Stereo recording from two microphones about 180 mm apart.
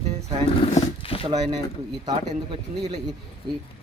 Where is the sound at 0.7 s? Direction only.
30° left (ahead or behind).